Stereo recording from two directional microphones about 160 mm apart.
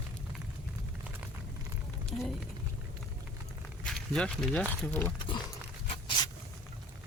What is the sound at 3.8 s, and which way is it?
Speech, 5° left (ahead or behind).